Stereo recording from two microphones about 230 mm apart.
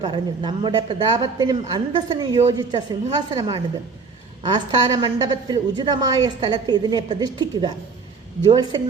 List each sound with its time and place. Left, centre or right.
0.0 s a woman's voice: right